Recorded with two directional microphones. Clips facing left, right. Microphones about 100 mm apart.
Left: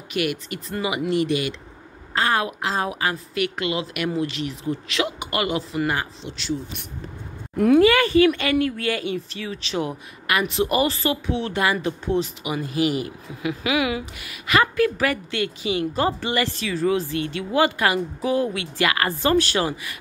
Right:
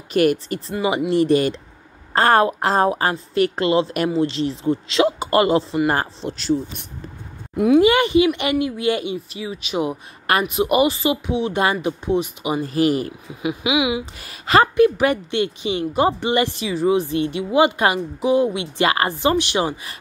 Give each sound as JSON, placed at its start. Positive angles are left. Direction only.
{"t": 0.1, "sound": "a woman's voice", "side_deg": -40}
{"t": 5.9, "sound": "speech", "side_deg": -45}
{"t": 7.5, "sound": "speech", "side_deg": -10}
{"t": 7.8, "sound": "speech", "side_deg": -20}
{"t": 10.3, "sound": "a woman's voice", "side_deg": -35}
{"t": 10.6, "sound": "speech", "side_deg": -15}
{"t": 12.6, "sound": "a woman's voice", "side_deg": -40}
{"t": 13.4, "sound": "speech", "side_deg": -20}
{"t": 14.1, "sound": "a woman's voice", "side_deg": -35}
{"t": 14.8, "sound": "speech", "side_deg": -25}